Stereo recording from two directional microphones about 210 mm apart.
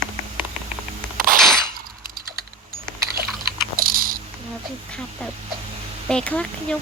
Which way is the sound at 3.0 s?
45° right (ahead or behind).